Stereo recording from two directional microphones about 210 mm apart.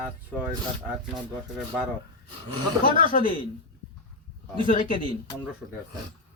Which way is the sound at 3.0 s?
40° left (ahead or behind).